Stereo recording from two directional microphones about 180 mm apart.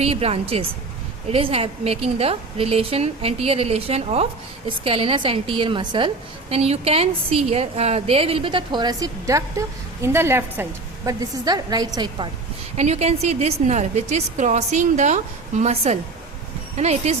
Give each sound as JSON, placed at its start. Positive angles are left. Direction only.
{"t": 0.0, "sound": "a woman's voice", "side_deg": -35}
{"t": 12.7, "sound": "a woman's voice", "side_deg": -35}